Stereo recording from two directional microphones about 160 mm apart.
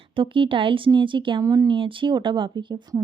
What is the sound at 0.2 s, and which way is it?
Speech, 30° right (ahead or behind).